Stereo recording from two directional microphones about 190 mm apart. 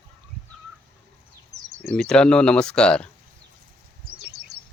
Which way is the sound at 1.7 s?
40° right (ahead or behind).